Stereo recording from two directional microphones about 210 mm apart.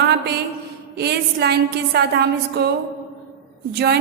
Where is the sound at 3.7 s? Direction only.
50° right (ahead or behind).